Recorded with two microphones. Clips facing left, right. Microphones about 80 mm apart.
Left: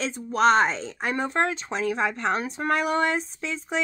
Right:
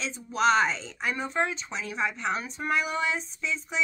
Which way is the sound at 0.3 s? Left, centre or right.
Left.